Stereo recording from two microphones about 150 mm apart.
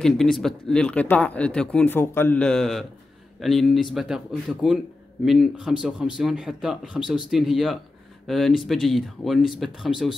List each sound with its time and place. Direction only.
0.0 s speech: centre (ahead or behind)